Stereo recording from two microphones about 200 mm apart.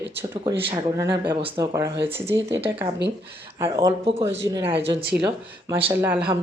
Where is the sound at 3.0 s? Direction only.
60° right (ahead or behind).